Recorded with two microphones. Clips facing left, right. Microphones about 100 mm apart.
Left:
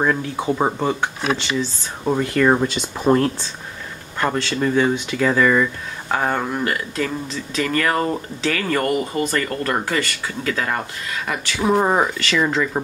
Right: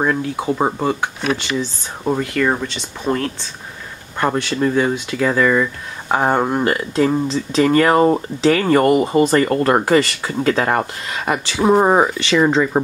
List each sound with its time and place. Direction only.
0.0 s speech: 5° right (ahead or behind)
4.2 s speech: 15° right (ahead or behind)
6.0 s speech: 25° right (ahead or behind); by 10.9 s 45° right (ahead or behind)
11.1 s speech: 30° right (ahead or behind)